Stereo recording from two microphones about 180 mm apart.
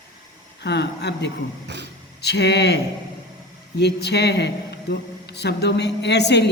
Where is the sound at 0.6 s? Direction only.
70° left (ahead or behind).